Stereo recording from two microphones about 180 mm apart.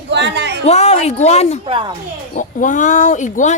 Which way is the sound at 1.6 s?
30° right (ahead or behind).